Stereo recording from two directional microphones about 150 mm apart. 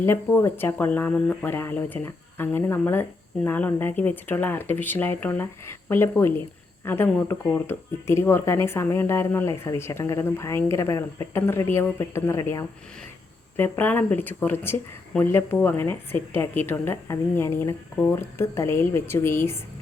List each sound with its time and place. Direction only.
0.0 s speech: 15° left (ahead or behind)